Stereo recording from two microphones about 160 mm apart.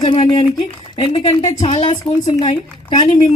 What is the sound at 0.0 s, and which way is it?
A woman's voice, 35° left (ahead or behind).